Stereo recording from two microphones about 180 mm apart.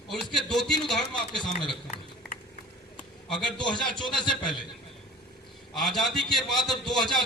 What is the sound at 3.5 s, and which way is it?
Speech, 5° left (ahead or behind).